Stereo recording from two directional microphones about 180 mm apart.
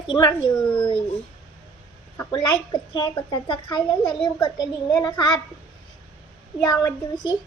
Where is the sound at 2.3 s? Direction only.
25° left (ahead or behind).